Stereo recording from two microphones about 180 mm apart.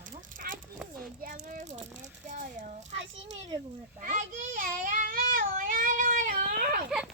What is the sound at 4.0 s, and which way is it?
Child singing, 45° right (ahead or behind).